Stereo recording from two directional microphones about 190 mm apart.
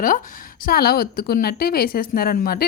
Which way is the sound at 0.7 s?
55° left (ahead or behind).